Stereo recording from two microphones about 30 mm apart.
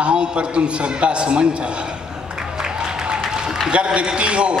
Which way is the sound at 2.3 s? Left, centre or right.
Right.